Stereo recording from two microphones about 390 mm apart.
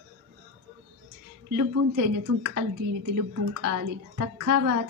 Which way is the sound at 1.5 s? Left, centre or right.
Right.